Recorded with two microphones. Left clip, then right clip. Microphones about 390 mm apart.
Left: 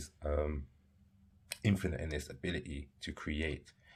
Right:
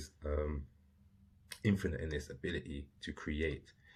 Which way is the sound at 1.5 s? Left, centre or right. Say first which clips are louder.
Even; left.